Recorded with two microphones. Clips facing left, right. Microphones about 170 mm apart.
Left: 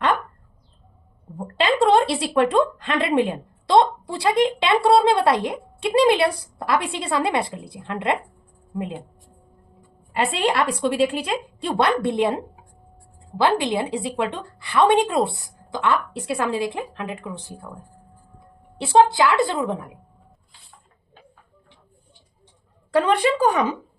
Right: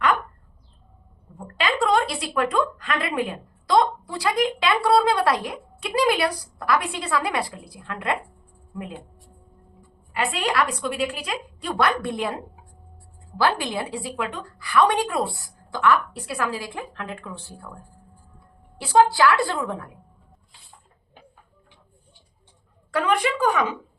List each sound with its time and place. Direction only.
1.4 s speech: 30° left (ahead or behind)
18.8 s speech: 25° left (ahead or behind)
22.9 s speech: 30° left (ahead or behind)